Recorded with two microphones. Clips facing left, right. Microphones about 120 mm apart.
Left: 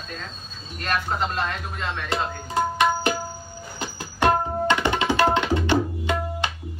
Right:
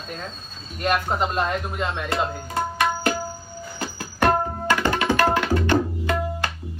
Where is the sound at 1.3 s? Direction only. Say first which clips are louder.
Right 4 dB; 10° right (ahead or behind).